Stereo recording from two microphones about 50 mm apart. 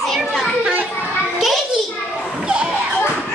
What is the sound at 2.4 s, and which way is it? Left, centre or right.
Children playing, centre.